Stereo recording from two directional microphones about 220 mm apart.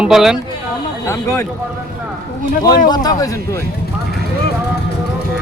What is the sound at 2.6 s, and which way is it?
Speech, 20° left (ahead or behind).